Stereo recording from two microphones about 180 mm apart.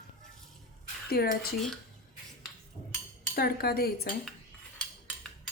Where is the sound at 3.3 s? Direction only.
60° left (ahead or behind).